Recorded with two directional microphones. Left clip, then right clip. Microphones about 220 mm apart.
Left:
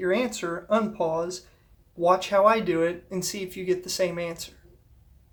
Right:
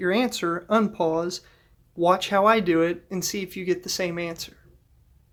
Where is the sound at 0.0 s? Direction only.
45° right (ahead or behind).